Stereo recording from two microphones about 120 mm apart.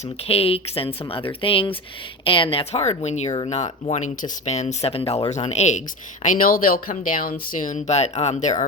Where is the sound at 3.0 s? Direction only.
70° left (ahead or behind).